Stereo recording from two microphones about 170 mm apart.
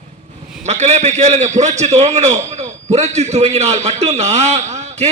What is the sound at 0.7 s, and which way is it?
A man's voice, 40° right (ahead or behind).